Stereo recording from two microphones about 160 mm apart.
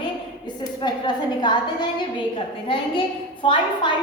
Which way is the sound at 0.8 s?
25° left (ahead or behind).